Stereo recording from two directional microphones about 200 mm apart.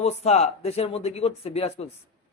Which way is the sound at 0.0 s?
35° left (ahead or behind).